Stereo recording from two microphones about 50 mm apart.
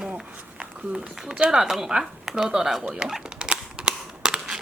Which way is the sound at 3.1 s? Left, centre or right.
Centre.